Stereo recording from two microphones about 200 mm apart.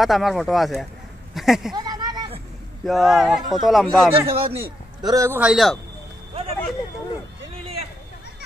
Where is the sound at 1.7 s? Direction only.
20° right (ahead or behind).